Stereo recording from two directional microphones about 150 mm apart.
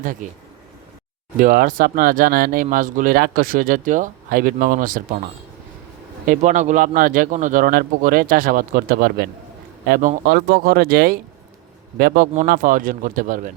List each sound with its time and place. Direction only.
1.4 s speech: 65° right (ahead or behind)
6.2 s speech: 60° right (ahead or behind); by 9.2 s 90° right
9.9 s speech: 75° right (ahead or behind); by 11.2 s 90° right
11.9 s speech: 75° right (ahead or behind)